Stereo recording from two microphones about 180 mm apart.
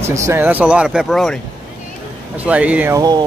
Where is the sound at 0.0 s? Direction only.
15° right (ahead or behind).